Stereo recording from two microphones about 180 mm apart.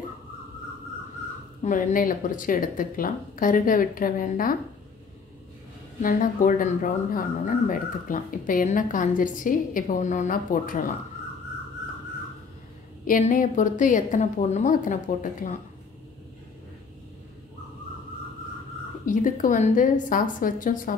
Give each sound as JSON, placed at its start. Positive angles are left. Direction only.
{"t": 1.6, "sound": "speech", "side_deg": 45}
{"t": 6.0, "sound": "speech", "side_deg": 50}
{"t": 13.0, "sound": "speech", "side_deg": 50}
{"t": 19.0, "sound": "speech", "side_deg": 45}